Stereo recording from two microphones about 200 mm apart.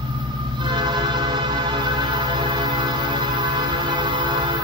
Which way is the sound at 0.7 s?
20° right (ahead or behind).